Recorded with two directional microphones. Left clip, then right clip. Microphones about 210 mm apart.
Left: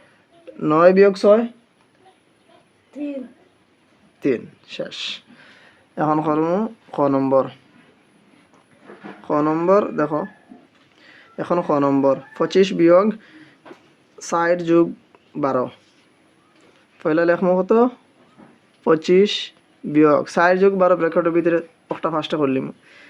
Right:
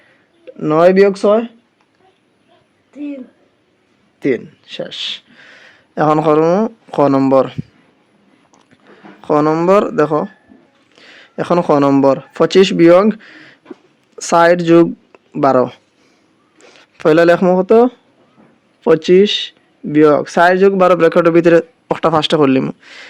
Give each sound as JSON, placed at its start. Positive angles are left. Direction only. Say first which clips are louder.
{"t": 0.4, "sound": "speech", "louder": "right 3 dB", "side_deg": -25}
{"t": 4.2, "sound": "speech", "louder": "right 4 dB", "side_deg": -30}
{"t": 9.2, "sound": "speech", "louder": "right 6 dB", "side_deg": -45}